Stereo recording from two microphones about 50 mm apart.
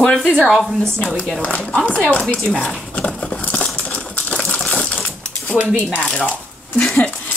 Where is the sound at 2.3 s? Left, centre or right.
Centre.